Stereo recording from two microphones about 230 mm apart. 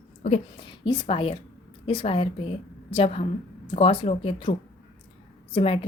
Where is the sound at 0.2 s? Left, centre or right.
Left.